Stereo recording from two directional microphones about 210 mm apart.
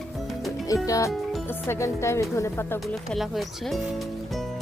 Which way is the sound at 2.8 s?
Centre (ahead or behind).